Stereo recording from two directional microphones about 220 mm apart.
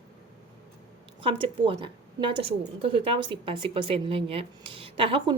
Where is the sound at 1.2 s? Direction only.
25° right (ahead or behind).